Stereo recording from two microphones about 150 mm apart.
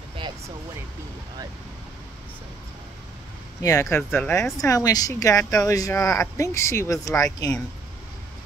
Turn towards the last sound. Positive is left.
turn(degrees=25)  # may be behind; listen again after turning